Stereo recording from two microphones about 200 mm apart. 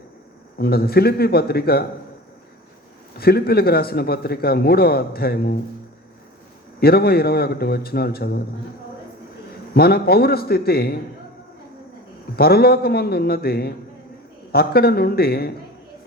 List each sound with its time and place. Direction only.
0.6 s a man's voice: 50° left (ahead or behind)
3.2 s a man's voice: 50° left (ahead or behind)
6.7 s a man's voice: 50° left (ahead or behind)
9.7 s a man's voice: 50° left (ahead or behind)
12.4 s a man's voice: 50° left (ahead or behind)